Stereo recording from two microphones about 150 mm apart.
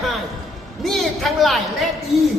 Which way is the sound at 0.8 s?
Centre (ahead or behind).